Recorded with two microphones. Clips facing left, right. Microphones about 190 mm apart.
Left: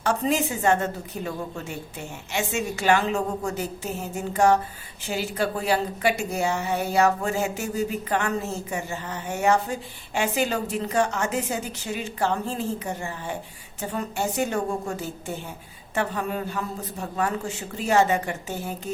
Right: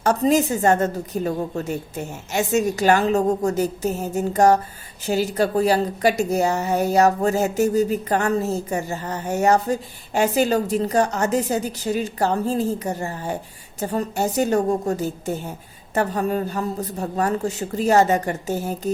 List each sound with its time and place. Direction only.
0.0 s a woman's voice: 40° right (ahead or behind)